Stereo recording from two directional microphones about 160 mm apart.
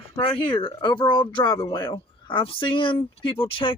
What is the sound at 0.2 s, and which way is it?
Speech, 30° left (ahead or behind).